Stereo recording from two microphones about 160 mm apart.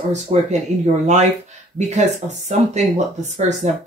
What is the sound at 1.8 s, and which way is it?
A woman's voice, 50° right (ahead or behind).